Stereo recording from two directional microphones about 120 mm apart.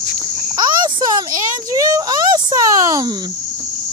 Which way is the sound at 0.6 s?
35° right (ahead or behind).